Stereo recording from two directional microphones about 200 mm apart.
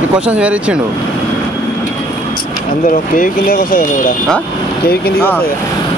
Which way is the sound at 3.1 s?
45° left (ahead or behind).